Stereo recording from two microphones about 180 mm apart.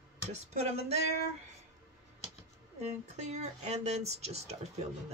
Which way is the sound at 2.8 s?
40° right (ahead or behind).